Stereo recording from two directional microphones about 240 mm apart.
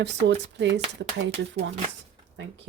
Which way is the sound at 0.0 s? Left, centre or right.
Right.